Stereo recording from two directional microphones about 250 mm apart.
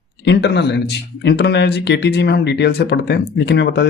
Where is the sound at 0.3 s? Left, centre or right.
Left.